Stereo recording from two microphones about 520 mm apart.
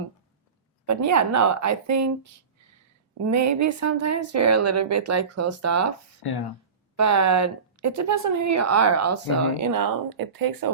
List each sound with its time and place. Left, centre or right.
0.9 s a woman's voice: right
3.2 s speech: right
6.2 s speech: left
6.9 s a woman's voice: right